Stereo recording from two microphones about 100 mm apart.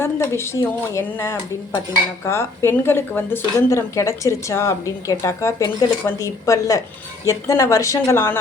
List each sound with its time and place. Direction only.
0.0 s speech: 25° left (ahead or behind)